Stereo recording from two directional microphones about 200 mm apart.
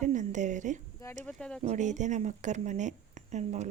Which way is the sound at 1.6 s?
35° right (ahead or behind).